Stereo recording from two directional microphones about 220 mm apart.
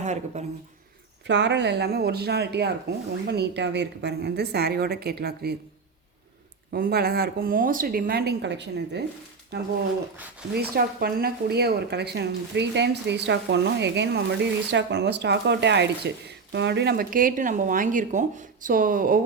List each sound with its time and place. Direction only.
0.0 s speech: 30° right (ahead or behind)
1.3 s speech: 50° right (ahead or behind)
6.7 s speech: 45° right (ahead or behind)